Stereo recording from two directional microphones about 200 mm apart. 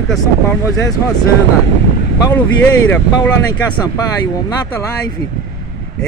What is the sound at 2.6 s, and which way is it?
Speech, 10° left (ahead or behind).